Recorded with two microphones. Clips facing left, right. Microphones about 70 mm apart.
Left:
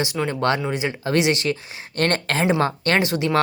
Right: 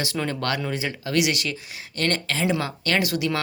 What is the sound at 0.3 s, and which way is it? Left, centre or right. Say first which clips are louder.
Speech: left 5 dB; left.